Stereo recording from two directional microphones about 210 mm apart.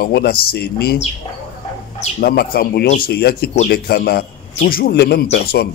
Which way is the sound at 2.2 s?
45° left (ahead or behind).